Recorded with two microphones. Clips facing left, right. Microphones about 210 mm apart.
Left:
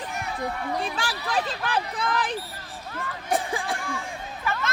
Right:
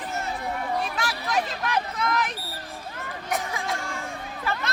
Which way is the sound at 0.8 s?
30° left (ahead or behind).